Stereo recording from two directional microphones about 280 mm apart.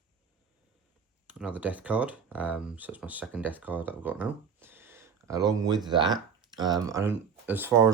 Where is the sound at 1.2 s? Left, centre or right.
Centre.